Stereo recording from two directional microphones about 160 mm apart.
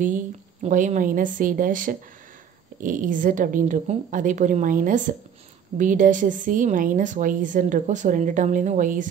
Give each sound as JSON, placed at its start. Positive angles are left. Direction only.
{"t": 0.0, "sound": "a woman's voice", "side_deg": -50}